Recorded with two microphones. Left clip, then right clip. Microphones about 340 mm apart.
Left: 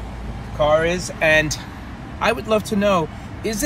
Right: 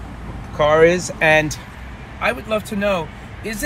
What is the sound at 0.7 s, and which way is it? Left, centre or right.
Speech, right.